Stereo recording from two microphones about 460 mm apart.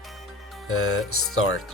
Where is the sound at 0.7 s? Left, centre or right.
Left.